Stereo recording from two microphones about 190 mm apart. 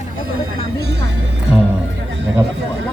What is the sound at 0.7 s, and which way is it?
Music, 60° right (ahead or behind).